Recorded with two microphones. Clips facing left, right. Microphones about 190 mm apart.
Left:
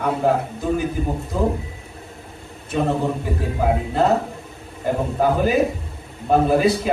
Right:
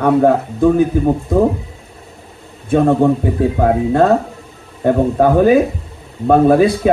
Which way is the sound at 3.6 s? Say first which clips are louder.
Right 6 dB; 55° right (ahead or behind).